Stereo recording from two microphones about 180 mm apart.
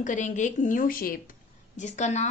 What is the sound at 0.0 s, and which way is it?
A woman's voice, 45° left (ahead or behind).